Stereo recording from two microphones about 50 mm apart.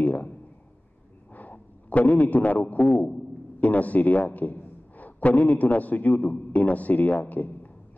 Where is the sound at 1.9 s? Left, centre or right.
Left.